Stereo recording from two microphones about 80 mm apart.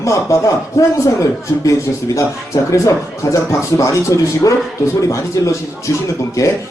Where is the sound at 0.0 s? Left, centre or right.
Left.